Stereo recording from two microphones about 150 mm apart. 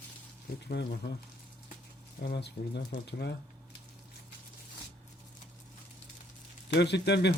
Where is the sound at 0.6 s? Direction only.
90° left.